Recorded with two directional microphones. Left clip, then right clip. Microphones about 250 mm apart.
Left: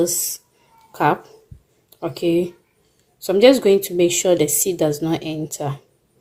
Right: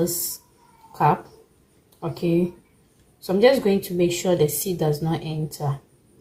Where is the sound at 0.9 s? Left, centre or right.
Left.